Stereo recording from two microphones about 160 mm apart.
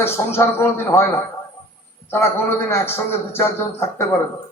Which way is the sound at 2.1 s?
15° left (ahead or behind).